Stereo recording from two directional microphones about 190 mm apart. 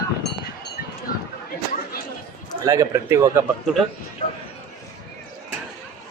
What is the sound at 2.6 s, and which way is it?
Speech, 15° right (ahead or behind).